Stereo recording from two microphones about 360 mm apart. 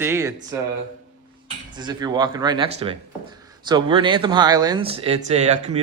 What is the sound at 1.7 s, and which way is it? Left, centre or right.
Speech, centre.